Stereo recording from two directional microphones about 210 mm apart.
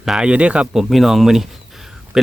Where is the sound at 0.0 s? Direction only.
5° right (ahead or behind).